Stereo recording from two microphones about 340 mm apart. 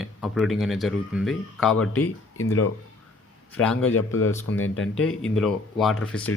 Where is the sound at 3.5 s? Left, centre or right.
Centre.